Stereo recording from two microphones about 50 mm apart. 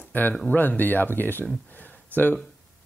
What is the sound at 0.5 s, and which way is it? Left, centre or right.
Speech, left.